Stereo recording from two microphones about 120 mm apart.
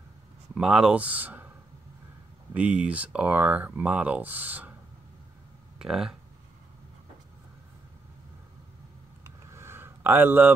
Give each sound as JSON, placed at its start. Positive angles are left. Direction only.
{"t": 0.6, "sound": "speech", "side_deg": -5}
{"t": 2.5, "sound": "speech", "side_deg": -10}
{"t": 5.8, "sound": "speech", "side_deg": -5}
{"t": 9.2, "sound": "vehicle", "side_deg": -20}